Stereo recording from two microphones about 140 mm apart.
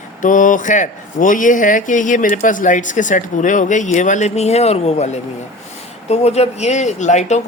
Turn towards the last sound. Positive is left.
turn(degrees=55)  # may be behind; listen again after turning